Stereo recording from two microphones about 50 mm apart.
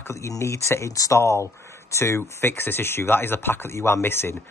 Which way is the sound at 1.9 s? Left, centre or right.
Left.